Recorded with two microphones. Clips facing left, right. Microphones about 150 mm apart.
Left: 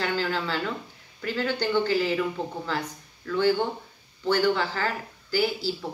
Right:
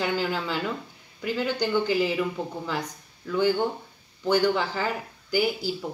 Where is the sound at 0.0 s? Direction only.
15° right (ahead or behind).